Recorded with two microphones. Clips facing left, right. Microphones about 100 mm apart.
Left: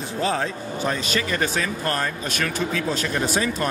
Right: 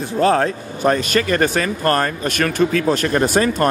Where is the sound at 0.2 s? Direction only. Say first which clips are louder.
Right 9 dB; 55° right (ahead or behind).